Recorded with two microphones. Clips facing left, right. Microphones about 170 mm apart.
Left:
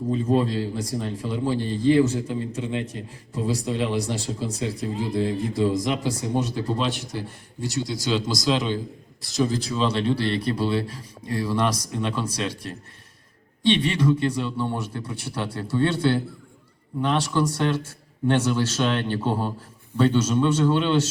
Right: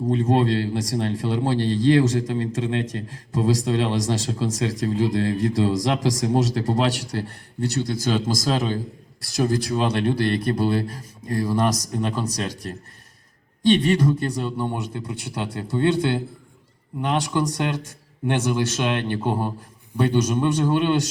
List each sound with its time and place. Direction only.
0.0 s a man's voice: 80° right; by 8.2 s 55° right (ahead or behind)
8.3 s speech: 45° right (ahead or behind)
9.6 s speech: 55° right (ahead or behind)
14.5 s speech: 20° right (ahead or behind)